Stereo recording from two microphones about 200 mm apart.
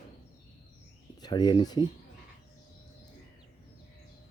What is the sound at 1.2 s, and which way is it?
Speech, 20° left (ahead or behind).